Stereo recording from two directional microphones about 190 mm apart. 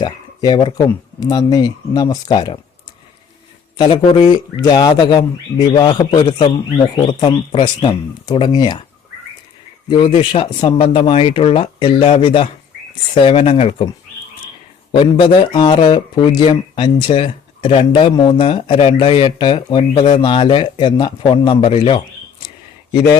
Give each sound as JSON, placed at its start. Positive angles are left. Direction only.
{"t": 0.0, "sound": "speech", "side_deg": 25}
{"t": 3.8, "sound": "speech", "side_deg": 25}
{"t": 9.9, "sound": "speech", "side_deg": 25}
{"t": 14.9, "sound": "speech", "side_deg": 25}